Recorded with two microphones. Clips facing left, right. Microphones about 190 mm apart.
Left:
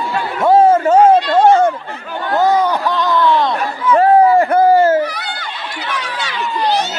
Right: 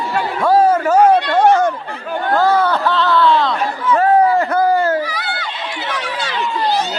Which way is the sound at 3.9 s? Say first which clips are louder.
Left 3 dB; 30° left (ahead or behind).